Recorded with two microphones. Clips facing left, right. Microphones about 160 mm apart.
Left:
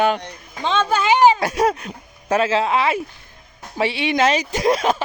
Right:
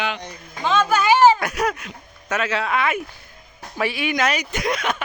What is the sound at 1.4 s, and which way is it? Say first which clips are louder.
Speech: left 5 dB; 30° left (ahead or behind).